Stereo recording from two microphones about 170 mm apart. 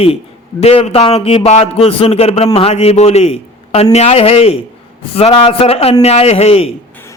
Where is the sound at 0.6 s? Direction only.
35° left (ahead or behind).